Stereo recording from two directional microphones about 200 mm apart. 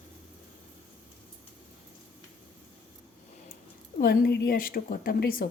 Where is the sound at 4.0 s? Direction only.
50° left (ahead or behind).